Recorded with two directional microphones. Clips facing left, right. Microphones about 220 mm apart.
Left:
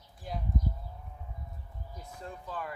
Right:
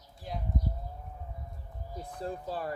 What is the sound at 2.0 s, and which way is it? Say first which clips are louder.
Speech: right 7 dB; 35° right (ahead or behind).